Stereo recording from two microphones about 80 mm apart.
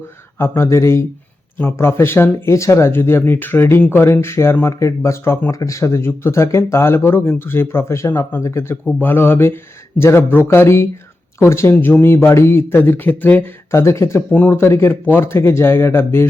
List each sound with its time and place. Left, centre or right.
0.3 s speech: left
11.7 s speech: left
14.3 s speech: centre
14.6 s speech: left